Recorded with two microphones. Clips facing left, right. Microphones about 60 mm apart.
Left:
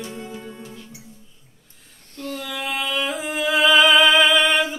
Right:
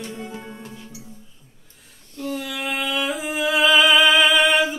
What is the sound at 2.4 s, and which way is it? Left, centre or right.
Music, centre.